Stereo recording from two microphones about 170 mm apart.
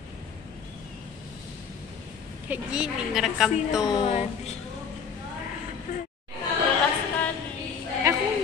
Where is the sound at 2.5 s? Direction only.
5° right (ahead or behind).